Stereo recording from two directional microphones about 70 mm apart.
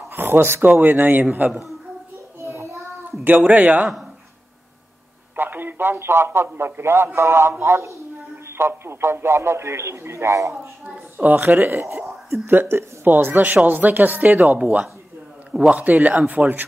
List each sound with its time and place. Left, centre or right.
0.1 s a woman's voice: right
2.4 s child singing: right
3.4 s a woman's voice: centre
3.8 s speech: centre
5.3 s a man's voice: right
11.1 s a woman's voice: right